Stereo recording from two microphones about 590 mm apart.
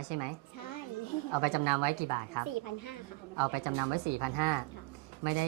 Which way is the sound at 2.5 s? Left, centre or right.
Left.